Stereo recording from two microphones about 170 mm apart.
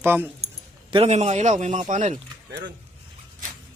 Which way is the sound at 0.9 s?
40° right (ahead or behind).